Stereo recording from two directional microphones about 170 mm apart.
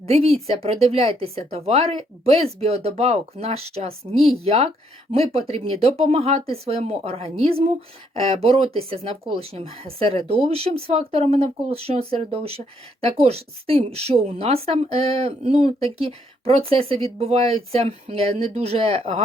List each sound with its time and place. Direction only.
0.1 s speech: 35° right (ahead or behind)
4.1 s speech: centre (ahead or behind)
4.4 s speech: 35° right (ahead or behind)